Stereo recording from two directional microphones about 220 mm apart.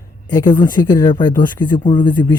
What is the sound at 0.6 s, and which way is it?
Speech, 20° left (ahead or behind).